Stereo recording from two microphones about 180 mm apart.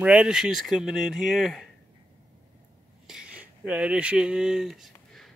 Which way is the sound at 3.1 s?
5° right (ahead or behind).